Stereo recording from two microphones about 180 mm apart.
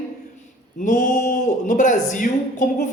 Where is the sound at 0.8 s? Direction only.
45° left (ahead or behind).